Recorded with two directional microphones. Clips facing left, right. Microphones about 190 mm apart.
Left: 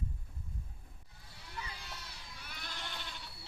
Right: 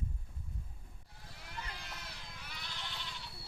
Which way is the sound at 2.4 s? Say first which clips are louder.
Left 2 dB; 50° left (ahead or behind).